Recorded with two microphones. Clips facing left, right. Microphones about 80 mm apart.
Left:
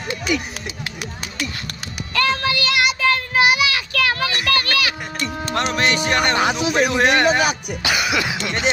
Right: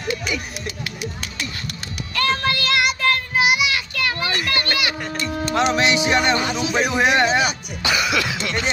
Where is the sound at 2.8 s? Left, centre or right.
Left.